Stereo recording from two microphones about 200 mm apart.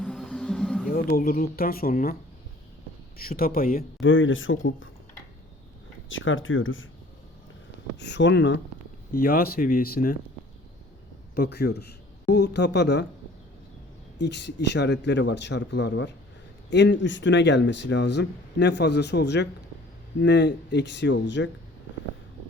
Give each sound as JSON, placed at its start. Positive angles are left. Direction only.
{"t": 0.0, "sound": "music", "side_deg": 5}
{"t": 0.9, "sound": "speech", "side_deg": 45}
{"t": 3.2, "sound": "speech", "side_deg": 45}
{"t": 4.0, "sound": "speech", "side_deg": 75}
{"t": 6.1, "sound": "speech", "side_deg": 75}
{"t": 7.9, "sound": "speech", "side_deg": 60}
{"t": 9.1, "sound": "speech", "side_deg": 50}
{"t": 11.3, "sound": "speech", "side_deg": 55}
{"t": 14.2, "sound": "speech", "side_deg": 60}